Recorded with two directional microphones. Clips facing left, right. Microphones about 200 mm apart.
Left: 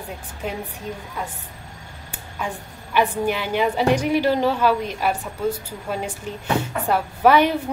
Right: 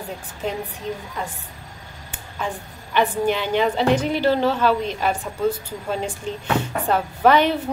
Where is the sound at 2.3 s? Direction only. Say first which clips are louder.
Right 1 dB; 10° left (ahead or behind).